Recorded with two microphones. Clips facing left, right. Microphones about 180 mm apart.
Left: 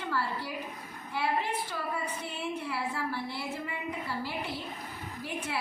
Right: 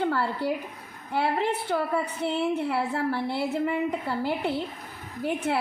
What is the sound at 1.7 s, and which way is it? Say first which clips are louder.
A woman's voice: right 9 dB; 60° right (ahead or behind).